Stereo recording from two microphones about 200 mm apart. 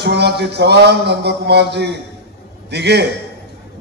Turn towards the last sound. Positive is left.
turn(degrees=-55)  # may be behind; listen again after turning